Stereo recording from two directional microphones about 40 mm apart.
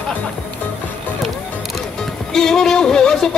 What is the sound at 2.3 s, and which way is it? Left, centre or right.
Speech, centre.